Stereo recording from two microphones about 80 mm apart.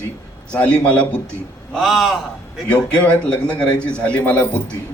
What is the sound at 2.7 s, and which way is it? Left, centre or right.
A man's voice, centre.